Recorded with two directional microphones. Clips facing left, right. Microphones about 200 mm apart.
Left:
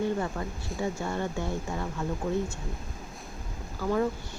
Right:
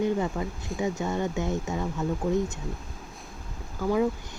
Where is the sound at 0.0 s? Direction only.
15° right (ahead or behind).